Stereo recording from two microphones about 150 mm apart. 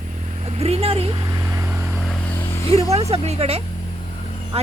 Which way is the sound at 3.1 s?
40° right (ahead or behind).